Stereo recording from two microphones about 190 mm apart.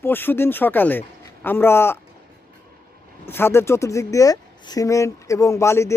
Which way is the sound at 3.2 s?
10° left (ahead or behind).